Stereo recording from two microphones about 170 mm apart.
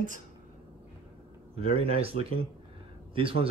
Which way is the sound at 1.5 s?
35° right (ahead or behind).